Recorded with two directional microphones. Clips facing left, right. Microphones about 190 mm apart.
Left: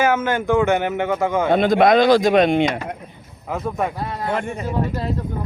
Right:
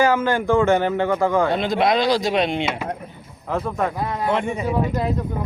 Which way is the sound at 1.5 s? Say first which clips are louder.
Left 5 dB; 55° left (ahead or behind).